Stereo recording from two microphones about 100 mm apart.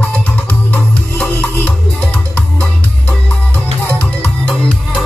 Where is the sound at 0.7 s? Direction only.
15° left (ahead or behind).